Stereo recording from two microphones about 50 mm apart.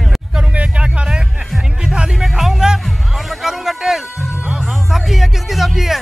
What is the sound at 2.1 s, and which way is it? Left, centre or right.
Music, centre.